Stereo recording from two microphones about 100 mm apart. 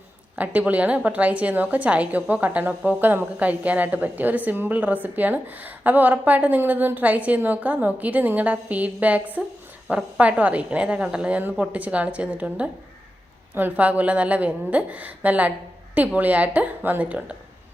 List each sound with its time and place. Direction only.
0.3 s a woman's voice: 15° right (ahead or behind)